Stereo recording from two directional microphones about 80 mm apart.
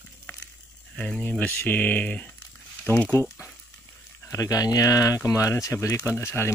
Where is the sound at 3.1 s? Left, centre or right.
Left.